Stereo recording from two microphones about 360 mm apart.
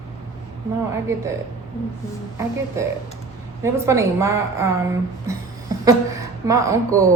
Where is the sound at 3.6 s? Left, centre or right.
Centre.